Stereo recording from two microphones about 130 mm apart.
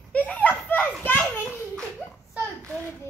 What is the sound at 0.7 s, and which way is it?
Children playing, 15° left (ahead or behind).